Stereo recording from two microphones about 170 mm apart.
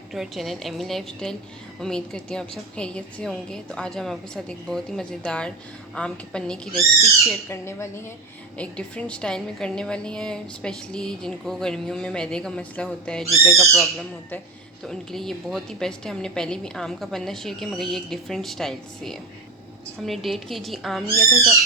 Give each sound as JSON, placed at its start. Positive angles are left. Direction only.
{"t": 0.1, "sound": "a woman's voice", "side_deg": 0}
{"t": 7.4, "sound": "a woman's voice", "side_deg": 15}